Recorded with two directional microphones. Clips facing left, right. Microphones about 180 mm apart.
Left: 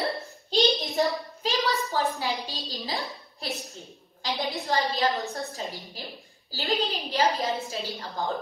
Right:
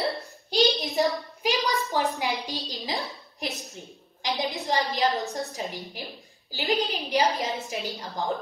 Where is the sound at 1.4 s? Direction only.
15° right (ahead or behind).